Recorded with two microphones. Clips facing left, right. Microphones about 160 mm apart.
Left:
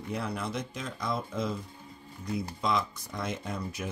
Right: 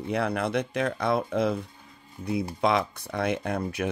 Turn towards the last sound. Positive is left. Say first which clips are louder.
# right 7 dB
turn(degrees=-65)  # may be behind; listen again after turning